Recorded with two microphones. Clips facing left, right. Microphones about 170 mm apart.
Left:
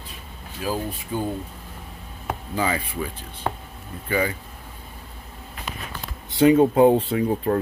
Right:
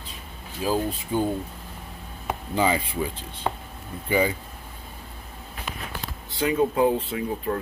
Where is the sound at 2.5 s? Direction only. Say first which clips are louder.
Right 2 dB; 20° right (ahead or behind).